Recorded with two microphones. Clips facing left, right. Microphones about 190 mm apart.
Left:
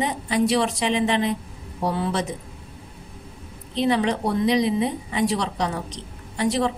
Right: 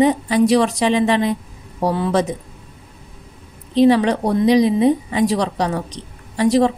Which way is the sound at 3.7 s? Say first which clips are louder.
Right 8 dB; 40° right (ahead or behind).